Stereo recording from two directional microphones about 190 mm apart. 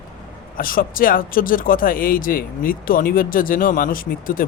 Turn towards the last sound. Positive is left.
turn(degrees=45)  # may be behind; listen again after turning